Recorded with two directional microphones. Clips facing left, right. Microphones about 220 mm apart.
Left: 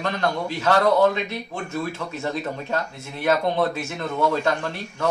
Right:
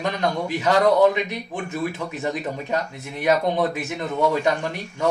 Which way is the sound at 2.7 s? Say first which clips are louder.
Right 1 dB; 15° right (ahead or behind).